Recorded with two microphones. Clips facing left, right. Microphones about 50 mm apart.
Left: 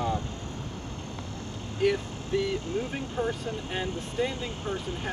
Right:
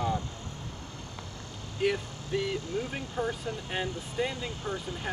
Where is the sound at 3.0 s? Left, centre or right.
Left.